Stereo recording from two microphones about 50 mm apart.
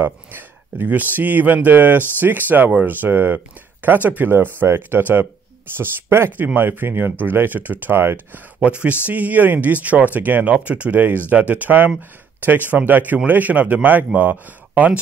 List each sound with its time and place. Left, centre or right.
0.0 s speech: right
5.8 s speech: right